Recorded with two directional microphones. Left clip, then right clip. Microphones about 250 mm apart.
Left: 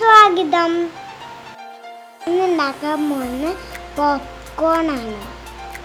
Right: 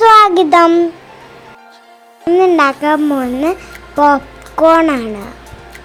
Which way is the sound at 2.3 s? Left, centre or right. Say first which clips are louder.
Right 8 dB; right.